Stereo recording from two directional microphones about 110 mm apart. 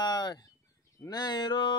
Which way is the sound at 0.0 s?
40° left (ahead or behind).